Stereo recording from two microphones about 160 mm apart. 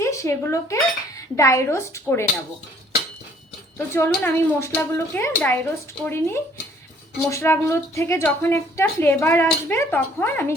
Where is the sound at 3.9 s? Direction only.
15° left (ahead or behind).